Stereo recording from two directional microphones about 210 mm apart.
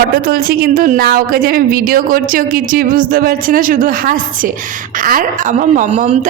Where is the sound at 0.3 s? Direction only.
45° right (ahead or behind).